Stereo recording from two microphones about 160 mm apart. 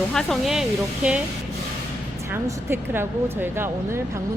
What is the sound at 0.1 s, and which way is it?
Speech, 5° left (ahead or behind).